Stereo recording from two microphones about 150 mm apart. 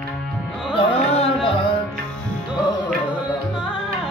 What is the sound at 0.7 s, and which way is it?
Music, 40° left (ahead or behind).